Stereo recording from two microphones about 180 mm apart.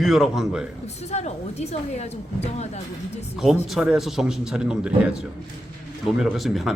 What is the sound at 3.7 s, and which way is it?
Speech, centre (ahead or behind).